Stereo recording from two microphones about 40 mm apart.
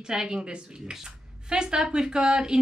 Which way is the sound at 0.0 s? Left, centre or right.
Centre.